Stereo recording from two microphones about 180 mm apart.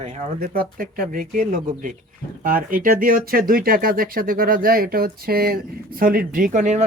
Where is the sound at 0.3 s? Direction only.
55° right (ahead or behind).